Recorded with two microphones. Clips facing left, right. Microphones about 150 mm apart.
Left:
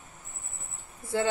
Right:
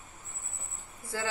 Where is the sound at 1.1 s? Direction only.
25° left (ahead or behind).